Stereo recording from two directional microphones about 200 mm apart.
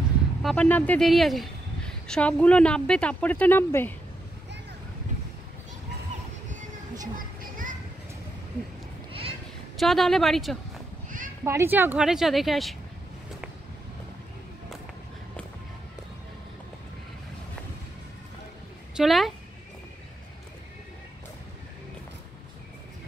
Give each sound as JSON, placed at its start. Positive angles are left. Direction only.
{"t": 0.4, "sound": "a woman's voice", "side_deg": 5}
{"t": 7.2, "sound": "children playing", "side_deg": -40}
{"t": 9.8, "sound": "a woman's voice", "side_deg": 0}
{"t": 11.4, "sound": "a woman's voice", "side_deg": -10}
{"t": 18.9, "sound": "a woman's voice", "side_deg": 0}